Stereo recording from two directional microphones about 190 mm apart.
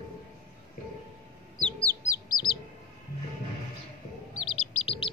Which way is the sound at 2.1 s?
25° left (ahead or behind).